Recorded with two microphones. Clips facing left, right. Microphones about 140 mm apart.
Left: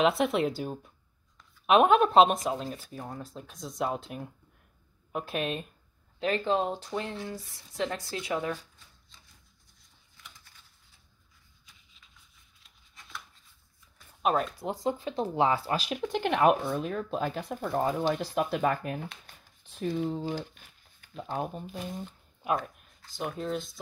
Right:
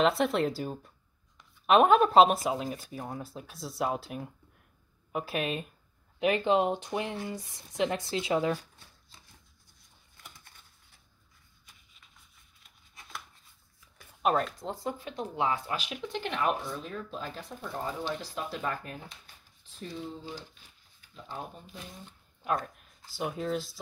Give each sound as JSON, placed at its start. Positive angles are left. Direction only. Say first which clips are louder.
{"t": 0.0, "sound": "speech", "louder": "left 1 dB", "side_deg": 0}
{"t": 6.1, "sound": "speech", "louder": "right 2 dB", "side_deg": -15}
{"t": 10.1, "sound": "a sound", "louder": "right 1 dB", "side_deg": -50}
{"t": 14.2, "sound": "speech", "louder": "even", "side_deg": 5}
{"t": 14.7, "sound": "speech", "louder": "left 5 dB", "side_deg": 20}
{"t": 16.2, "sound": "speech", "louder": "left 7 dB", "side_deg": 60}
{"t": 22.8, "sound": "speech", "louder": "right 1 dB", "side_deg": -5}